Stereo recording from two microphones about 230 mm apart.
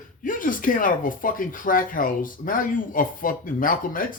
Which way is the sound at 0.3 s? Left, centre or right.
Left.